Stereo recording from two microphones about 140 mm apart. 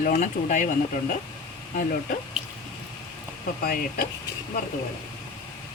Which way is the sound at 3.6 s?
90° left.